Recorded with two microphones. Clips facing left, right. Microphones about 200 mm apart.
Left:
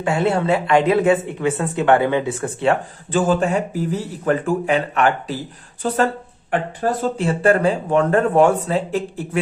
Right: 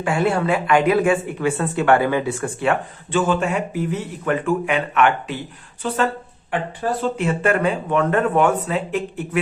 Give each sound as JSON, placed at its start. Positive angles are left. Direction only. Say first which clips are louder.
{"t": 0.0, "sound": "a woman's voice", "louder": "left 1 dB", "side_deg": 25}